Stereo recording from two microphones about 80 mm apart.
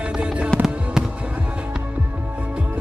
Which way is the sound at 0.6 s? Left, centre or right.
Centre.